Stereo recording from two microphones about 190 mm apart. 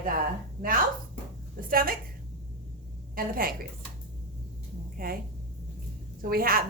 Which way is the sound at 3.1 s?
50° right (ahead or behind).